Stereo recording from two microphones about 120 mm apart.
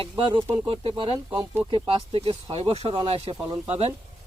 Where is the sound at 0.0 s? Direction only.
45° right (ahead or behind).